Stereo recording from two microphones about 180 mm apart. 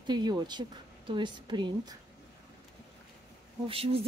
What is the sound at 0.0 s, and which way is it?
Speech, 25° right (ahead or behind).